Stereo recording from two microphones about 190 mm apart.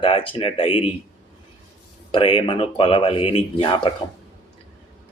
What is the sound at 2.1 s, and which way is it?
Speech, 25° left (ahead or behind).